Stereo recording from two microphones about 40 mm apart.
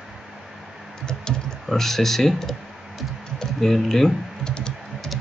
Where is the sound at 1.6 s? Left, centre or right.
Centre.